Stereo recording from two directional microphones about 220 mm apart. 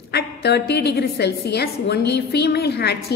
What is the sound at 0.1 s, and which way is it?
A woman's voice, 45° left (ahead or behind).